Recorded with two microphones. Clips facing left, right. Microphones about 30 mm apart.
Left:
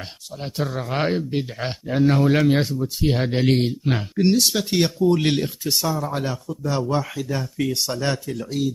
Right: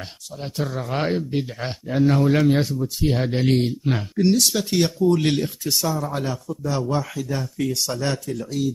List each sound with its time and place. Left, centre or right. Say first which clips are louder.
0.4 s speech: left 1 dB; centre
6.6 s speech: left 1 dB; centre